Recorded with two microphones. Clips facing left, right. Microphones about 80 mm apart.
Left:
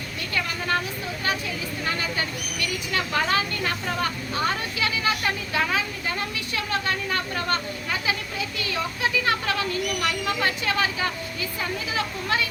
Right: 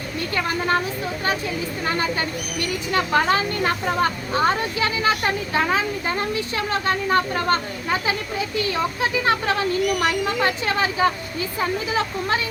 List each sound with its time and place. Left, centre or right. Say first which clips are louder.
0.3 s speech: right 4 dB; right
1.8 s speech: right 4 dB; right